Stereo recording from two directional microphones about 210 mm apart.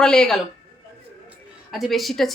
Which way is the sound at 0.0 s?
5° left (ahead or behind).